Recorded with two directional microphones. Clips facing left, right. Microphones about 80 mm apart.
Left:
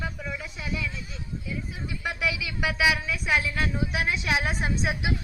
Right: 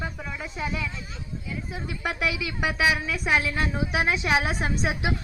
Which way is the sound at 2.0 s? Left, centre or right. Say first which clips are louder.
Right 2 dB; right.